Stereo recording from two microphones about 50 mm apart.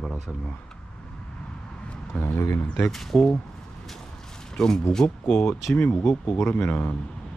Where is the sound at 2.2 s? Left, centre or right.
Left.